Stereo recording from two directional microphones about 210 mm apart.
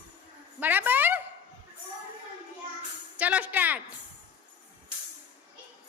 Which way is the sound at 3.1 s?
5° right (ahead or behind).